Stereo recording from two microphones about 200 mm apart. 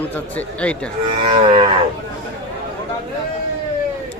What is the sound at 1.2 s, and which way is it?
Livestock, 25° right (ahead or behind).